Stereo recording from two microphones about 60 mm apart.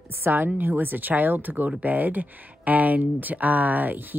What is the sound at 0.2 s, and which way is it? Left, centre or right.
Speech, right.